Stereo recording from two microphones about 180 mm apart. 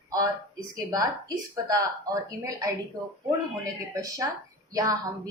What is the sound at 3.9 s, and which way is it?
A woman's voice, 20° right (ahead or behind).